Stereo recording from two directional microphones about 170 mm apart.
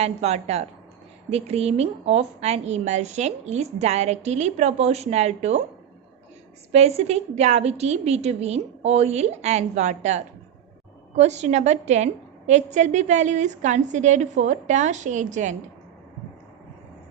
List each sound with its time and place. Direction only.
0.0 s a woman's voice: 40° right (ahead or behind)
6.7 s a woman's voice: 40° right (ahead or behind)